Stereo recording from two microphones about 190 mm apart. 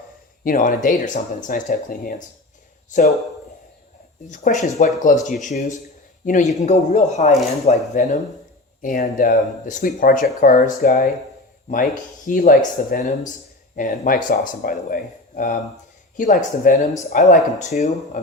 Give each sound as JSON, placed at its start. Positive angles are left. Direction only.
{"t": 0.4, "sound": "speech", "side_deg": 45}
{"t": 4.3, "sound": "speech", "side_deg": 40}